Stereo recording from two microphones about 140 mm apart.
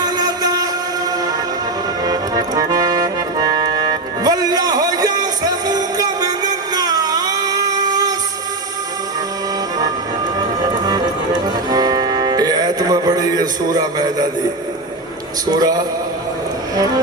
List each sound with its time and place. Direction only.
0.0 s a sound: 30° right (ahead or behind)
2.0 s music: 25° right (ahead or behind)
10.8 s music: 30° right (ahead or behind)
15.4 s a man's voice: 25° right (ahead or behind)